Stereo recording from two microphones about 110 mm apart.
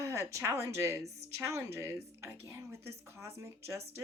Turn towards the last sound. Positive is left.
turn(degrees=-25)  # may be behind; listen again after turning